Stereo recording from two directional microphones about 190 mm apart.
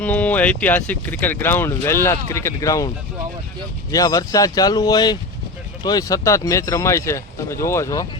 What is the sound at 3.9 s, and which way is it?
Speech, 20° left (ahead or behind).